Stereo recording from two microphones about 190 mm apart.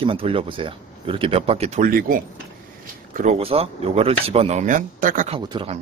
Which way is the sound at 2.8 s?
45° right (ahead or behind).